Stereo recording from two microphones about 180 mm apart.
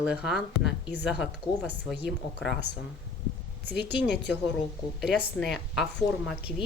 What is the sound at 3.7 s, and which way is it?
Speech, 70° left (ahead or behind).